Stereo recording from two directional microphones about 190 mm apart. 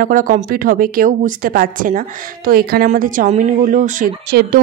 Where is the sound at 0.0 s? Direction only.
45° right (ahead or behind).